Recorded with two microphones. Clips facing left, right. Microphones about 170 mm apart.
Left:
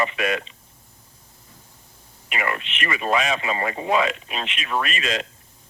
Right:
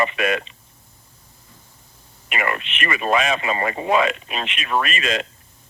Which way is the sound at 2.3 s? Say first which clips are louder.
Right 2 dB; 60° right (ahead or behind).